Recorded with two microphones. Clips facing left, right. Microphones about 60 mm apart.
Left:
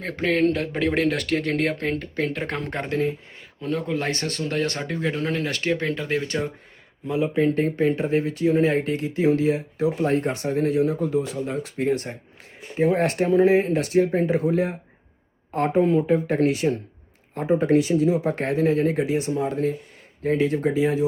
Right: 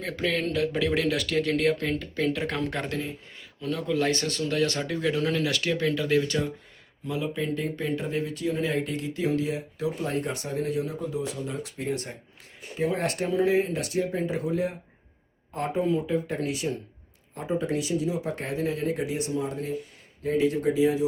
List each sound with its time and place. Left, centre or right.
0.0 s speech: left